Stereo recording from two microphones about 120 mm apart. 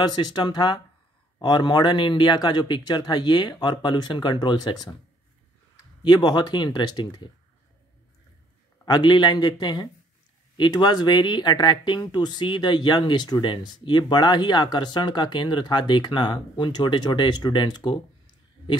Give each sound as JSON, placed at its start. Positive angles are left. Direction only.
{"t": 0.1, "sound": "speech", "side_deg": 35}
{"t": 6.0, "sound": "speech", "side_deg": 35}
{"t": 8.8, "sound": "speech", "side_deg": 35}